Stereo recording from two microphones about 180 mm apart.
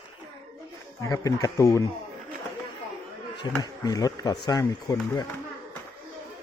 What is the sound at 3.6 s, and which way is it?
Speech, 20° left (ahead or behind).